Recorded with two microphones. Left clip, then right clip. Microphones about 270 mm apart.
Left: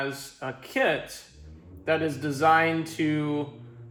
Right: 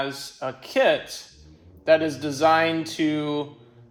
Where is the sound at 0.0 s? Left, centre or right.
Right.